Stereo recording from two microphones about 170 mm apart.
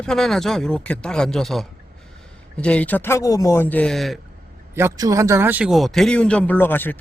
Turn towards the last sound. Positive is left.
turn(degrees=10)  # may be behind; listen again after turning